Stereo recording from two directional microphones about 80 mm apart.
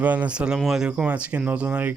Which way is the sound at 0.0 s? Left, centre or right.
Centre.